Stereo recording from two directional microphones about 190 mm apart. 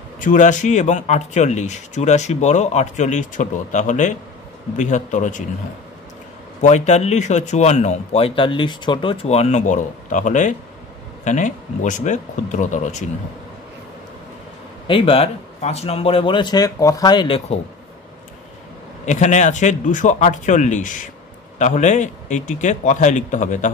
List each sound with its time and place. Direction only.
0.2 s speech: 40° left (ahead or behind)
6.6 s speech: 35° left (ahead or behind)
14.9 s a man's voice: 30° left (ahead or behind)
19.0 s speech: 40° left (ahead or behind)